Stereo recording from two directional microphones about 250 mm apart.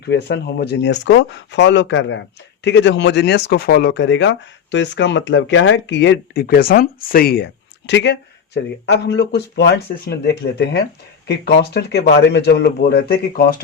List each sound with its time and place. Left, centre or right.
0.0 s speech: left